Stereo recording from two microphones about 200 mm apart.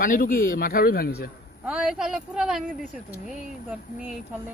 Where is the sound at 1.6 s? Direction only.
5° right (ahead or behind).